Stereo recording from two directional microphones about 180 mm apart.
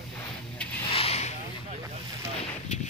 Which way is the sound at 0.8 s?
35° left (ahead or behind).